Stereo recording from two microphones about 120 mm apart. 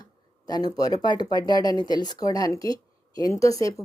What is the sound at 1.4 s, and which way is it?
Speech, 40° right (ahead or behind).